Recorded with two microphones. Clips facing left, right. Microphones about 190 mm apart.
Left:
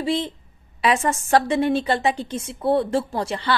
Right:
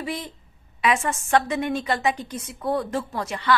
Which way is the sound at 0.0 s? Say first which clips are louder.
Left 7 dB; 25° left (ahead or behind).